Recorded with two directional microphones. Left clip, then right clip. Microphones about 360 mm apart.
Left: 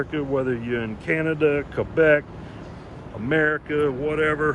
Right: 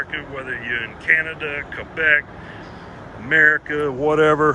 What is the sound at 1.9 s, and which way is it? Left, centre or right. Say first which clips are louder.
Speech: right 1 dB; left.